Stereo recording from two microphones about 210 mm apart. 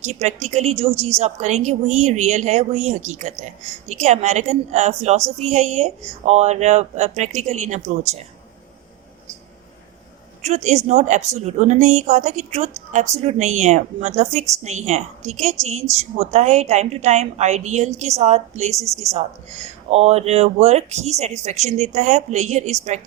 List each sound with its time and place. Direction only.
0.0 s speech: 30° right (ahead or behind)
10.4 s speech: 30° right (ahead or behind)
19.9 s speech: 30° right (ahead or behind)